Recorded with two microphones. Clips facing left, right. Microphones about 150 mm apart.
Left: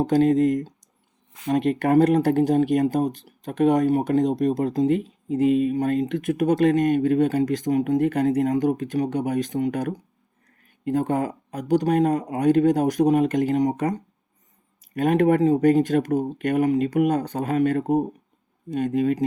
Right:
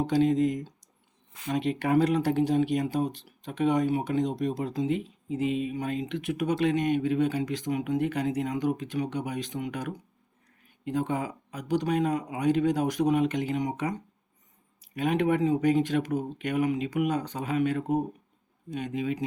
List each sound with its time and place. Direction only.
0.0 s speech: 50° left (ahead or behind)